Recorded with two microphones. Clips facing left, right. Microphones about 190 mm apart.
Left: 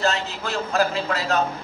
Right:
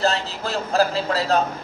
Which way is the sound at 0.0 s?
35° right (ahead or behind).